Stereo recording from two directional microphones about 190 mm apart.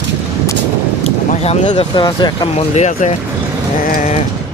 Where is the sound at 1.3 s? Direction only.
35° left (ahead or behind).